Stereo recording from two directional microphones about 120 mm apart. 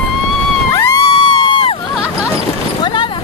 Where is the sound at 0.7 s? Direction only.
20° left (ahead or behind).